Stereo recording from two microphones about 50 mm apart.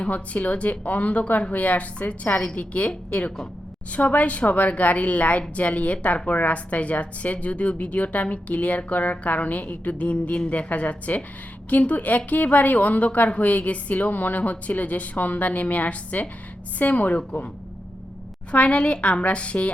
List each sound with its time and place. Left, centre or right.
0.0 s a woman's voice: left
18.5 s a woman's voice: left